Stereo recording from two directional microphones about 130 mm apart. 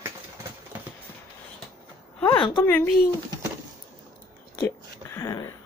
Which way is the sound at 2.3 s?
40° left (ahead or behind).